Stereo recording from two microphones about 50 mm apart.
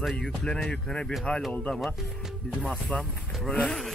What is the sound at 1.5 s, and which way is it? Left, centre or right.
Speech, left.